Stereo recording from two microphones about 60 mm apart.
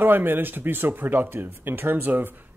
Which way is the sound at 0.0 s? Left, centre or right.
Right.